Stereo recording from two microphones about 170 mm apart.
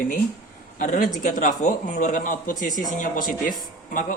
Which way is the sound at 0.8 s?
50° left (ahead or behind).